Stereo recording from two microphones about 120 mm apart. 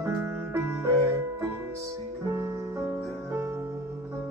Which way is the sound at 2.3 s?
25° right (ahead or behind).